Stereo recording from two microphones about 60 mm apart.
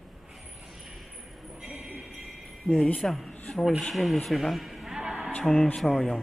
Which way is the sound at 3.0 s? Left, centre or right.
Centre.